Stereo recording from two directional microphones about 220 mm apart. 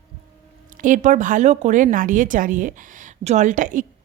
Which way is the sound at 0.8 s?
35° right (ahead or behind).